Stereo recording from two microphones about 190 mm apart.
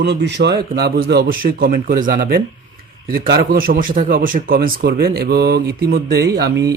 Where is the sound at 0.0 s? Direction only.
65° right (ahead or behind).